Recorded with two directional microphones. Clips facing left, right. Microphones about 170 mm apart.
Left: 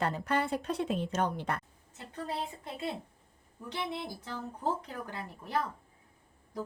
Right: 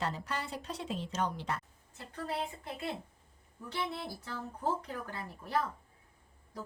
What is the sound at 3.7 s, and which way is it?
Speech, 20° left (ahead or behind).